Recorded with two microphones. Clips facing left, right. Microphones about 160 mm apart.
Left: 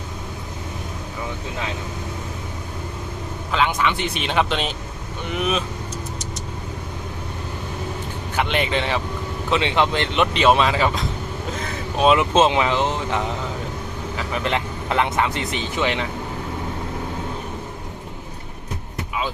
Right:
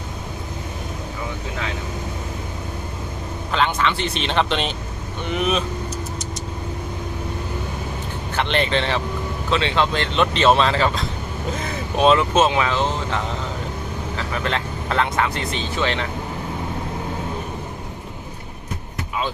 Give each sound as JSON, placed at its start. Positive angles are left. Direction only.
{"t": 3.5, "sound": "speech", "side_deg": 10}
{"t": 8.4, "sound": "speech", "side_deg": 10}
{"t": 12.1, "sound": "speech", "side_deg": 20}